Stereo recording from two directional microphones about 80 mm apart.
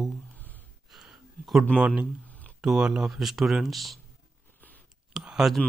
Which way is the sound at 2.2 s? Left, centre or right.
Centre.